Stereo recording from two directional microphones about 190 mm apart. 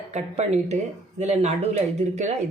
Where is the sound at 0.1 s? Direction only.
35° right (ahead or behind).